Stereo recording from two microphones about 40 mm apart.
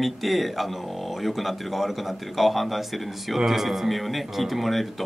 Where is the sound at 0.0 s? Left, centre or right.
Centre.